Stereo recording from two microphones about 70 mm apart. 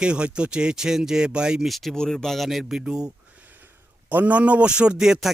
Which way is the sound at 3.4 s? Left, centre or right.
Right.